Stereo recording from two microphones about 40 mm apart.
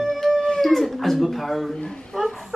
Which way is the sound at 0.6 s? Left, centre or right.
Centre.